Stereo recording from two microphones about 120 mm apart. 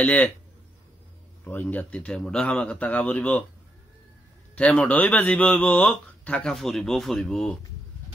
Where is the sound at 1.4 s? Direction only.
15° left (ahead or behind).